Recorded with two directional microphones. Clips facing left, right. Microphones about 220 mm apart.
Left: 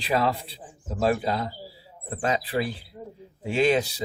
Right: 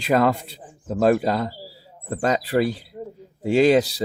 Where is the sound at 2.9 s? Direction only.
25° right (ahead or behind).